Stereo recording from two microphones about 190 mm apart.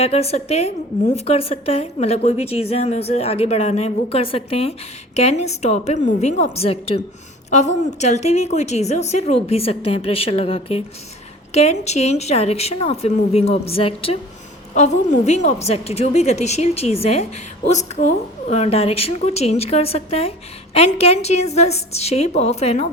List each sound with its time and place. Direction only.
0.0 s a woman's voice: 35° left (ahead or behind)